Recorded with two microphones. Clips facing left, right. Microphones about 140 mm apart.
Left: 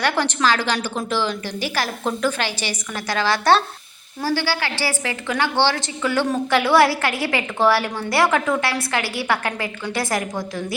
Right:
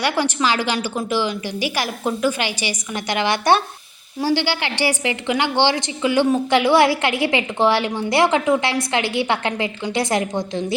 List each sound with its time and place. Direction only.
0.0 s a woman's voice: 10° right (ahead or behind)